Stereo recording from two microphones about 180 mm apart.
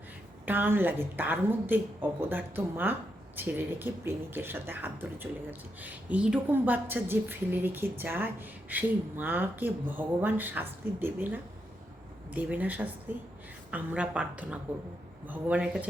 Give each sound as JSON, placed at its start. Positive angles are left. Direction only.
{"t": 0.4, "sound": "speech", "side_deg": -10}